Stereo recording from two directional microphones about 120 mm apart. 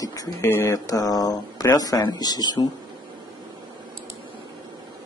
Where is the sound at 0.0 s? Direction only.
30° left (ahead or behind).